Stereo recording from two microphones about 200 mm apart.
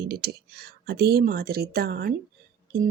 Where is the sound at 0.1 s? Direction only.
50° right (ahead or behind).